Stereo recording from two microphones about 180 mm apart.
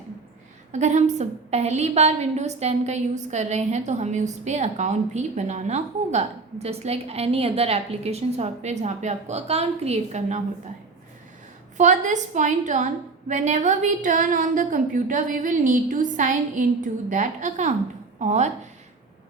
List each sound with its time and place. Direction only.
0.7 s a woman's voice: 40° right (ahead or behind)
11.8 s a woman's voice: 40° right (ahead or behind)